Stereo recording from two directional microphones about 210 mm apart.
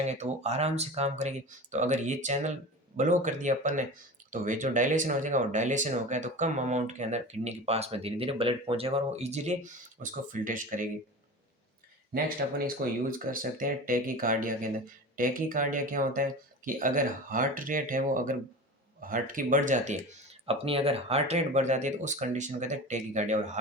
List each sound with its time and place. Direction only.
0.0 s speech: 30° right (ahead or behind)
12.1 s speech: 45° right (ahead or behind)